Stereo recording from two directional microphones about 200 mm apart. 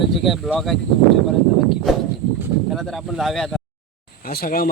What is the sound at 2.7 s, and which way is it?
Speech, centre (ahead or behind).